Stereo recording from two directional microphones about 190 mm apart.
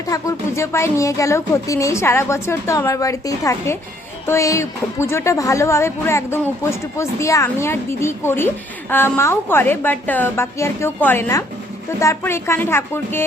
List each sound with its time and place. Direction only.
0.1 s a woman's voice: 15° left (ahead or behind)